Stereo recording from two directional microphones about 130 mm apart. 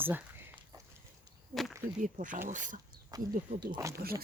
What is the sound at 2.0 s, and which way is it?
Speech, 85° right.